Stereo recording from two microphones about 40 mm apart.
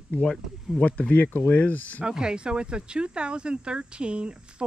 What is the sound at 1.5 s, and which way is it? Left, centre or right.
Speech, left.